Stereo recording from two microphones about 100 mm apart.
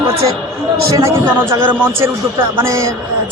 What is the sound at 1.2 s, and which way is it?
A man's voice, 20° right (ahead or behind).